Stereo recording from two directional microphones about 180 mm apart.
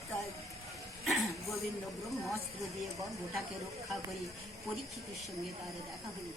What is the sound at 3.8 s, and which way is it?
Speech, centre (ahead or behind).